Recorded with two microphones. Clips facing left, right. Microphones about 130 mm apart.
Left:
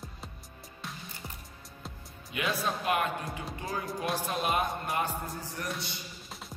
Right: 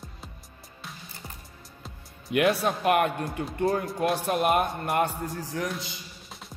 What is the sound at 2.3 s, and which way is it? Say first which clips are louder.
A man's voice: right 8 dB; 65° right (ahead or behind).